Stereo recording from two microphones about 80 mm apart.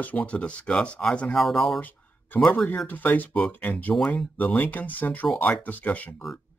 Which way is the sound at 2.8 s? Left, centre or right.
Left.